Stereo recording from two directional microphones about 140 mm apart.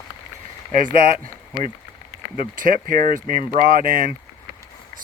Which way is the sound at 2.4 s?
80° right.